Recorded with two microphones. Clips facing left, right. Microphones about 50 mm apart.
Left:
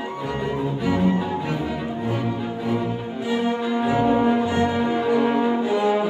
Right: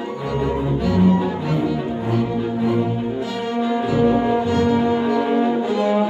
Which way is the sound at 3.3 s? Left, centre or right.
Left.